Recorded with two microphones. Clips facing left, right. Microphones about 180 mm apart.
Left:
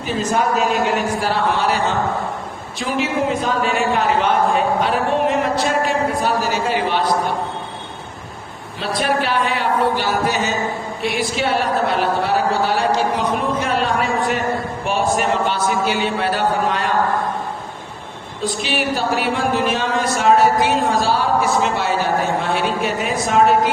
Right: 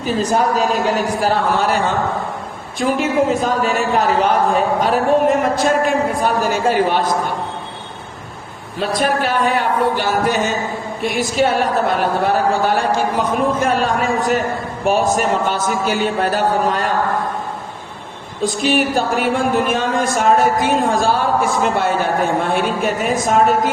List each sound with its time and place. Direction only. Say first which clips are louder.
0.0 s speech: right 3 dB; 35° right (ahead or behind)
8.8 s speech: right 2 dB; 45° right (ahead or behind)
18.4 s speech: right 5 dB; 45° right (ahead or behind)